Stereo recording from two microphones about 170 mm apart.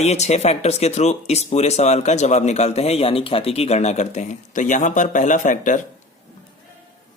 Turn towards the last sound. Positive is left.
turn(degrees=50)  # may be behind; listen again after turning